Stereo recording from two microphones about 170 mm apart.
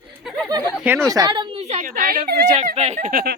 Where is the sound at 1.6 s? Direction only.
40° right (ahead or behind).